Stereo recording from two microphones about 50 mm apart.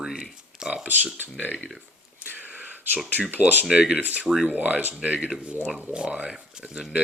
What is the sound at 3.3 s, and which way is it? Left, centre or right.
Speech, right.